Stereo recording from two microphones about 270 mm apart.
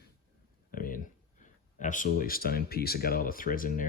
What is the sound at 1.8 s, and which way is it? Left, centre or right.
Speech, left.